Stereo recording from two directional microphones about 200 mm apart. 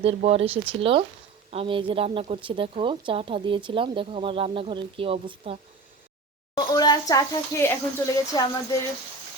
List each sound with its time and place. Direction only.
0.0 s speech: 30° right (ahead or behind)
6.5 s a sound: 20° left (ahead or behind)
7.1 s speech: 15° left (ahead or behind)